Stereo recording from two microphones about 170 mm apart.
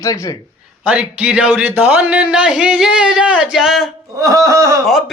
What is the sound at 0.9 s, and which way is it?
A man's voice, 5° right (ahead or behind).